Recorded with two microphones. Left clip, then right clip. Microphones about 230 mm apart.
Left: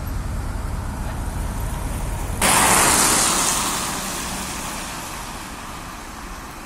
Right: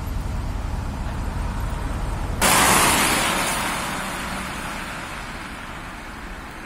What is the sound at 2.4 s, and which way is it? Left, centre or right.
Static, right.